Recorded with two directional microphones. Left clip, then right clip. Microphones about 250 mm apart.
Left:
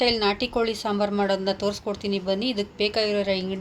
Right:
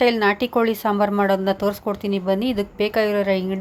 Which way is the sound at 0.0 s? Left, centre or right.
Right.